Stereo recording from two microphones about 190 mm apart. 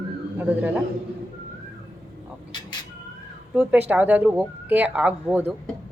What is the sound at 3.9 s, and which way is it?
Speech, 10° right (ahead or behind).